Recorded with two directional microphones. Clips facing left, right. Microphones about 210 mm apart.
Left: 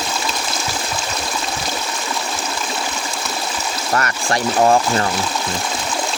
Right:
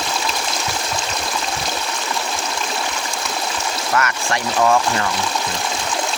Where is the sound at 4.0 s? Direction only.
35° left (ahead or behind).